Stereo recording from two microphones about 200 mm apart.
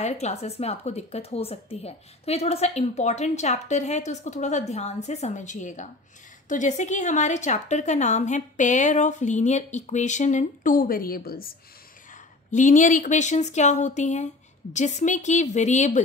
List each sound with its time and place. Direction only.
0.0 s speech: 35° left (ahead or behind)